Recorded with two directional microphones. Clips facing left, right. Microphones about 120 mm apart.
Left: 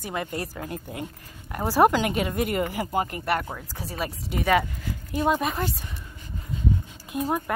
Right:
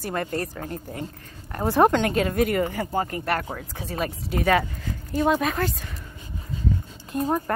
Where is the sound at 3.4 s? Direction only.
5° right (ahead or behind).